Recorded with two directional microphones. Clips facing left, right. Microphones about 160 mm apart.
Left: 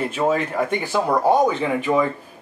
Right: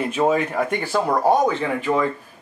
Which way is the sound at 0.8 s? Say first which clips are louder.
Even; 15° left (ahead or behind).